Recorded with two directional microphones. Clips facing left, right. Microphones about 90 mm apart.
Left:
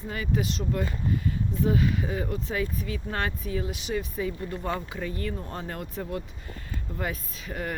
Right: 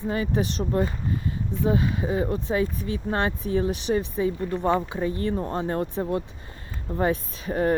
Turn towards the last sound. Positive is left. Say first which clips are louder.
# right 10 dB
turn(degrees=-35)  # may be behind; listen again after turning